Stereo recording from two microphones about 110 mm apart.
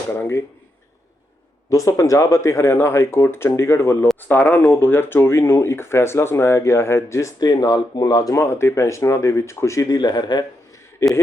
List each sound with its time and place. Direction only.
0.1 s speech: 20° left (ahead or behind)
1.7 s speech: 30° left (ahead or behind)
11.0 s speech: 25° left (ahead or behind)